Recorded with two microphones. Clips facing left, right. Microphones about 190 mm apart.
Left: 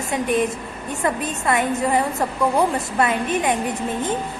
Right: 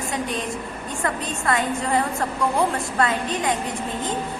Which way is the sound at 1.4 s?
20° left (ahead or behind).